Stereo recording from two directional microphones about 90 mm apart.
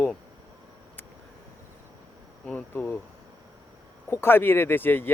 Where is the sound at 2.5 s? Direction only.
20° left (ahead or behind).